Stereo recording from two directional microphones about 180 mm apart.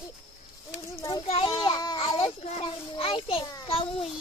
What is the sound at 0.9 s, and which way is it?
Child singing, 25° left (ahead or behind).